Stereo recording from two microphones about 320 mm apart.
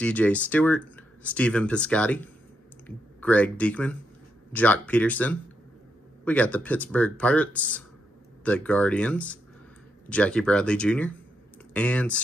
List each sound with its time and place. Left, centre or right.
0.0 s speech: centre